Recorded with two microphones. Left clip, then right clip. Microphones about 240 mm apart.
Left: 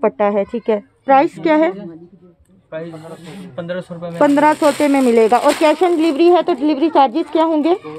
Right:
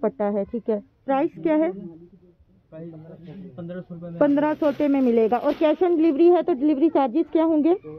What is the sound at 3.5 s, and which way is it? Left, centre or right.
Speech, left.